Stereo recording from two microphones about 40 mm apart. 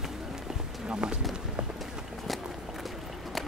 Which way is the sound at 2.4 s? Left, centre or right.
Centre.